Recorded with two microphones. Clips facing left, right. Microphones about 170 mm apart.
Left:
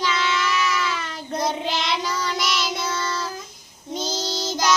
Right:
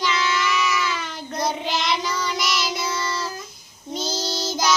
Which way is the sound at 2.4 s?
25° left (ahead or behind).